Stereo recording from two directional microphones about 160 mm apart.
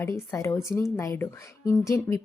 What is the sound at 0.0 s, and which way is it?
A woman's voice, 15° left (ahead or behind).